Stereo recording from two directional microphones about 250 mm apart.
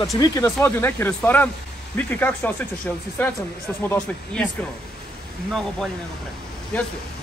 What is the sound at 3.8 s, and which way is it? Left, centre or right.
Speech, centre.